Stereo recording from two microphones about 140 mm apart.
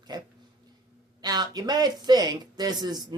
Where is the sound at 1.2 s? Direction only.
30° right (ahead or behind).